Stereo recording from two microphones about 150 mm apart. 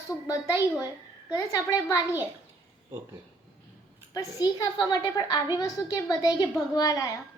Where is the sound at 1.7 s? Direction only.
25° left (ahead or behind).